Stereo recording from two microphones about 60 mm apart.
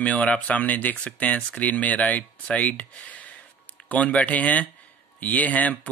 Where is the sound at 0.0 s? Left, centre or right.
Left.